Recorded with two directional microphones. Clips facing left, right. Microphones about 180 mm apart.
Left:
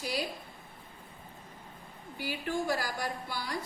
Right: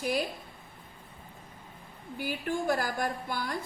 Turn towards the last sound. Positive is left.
turn(degrees=-50)  # may be behind; listen again after turning